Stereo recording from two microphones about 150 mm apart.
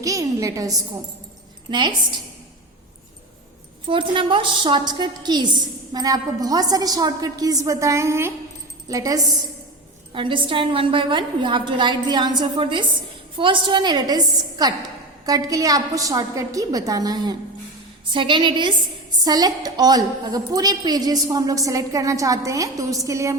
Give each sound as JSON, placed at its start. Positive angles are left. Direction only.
{"t": 0.0, "sound": "a woman's voice", "side_deg": -20}
{"t": 3.8, "sound": "a woman's voice", "side_deg": -35}
{"t": 15.3, "sound": "a woman's voice", "side_deg": -25}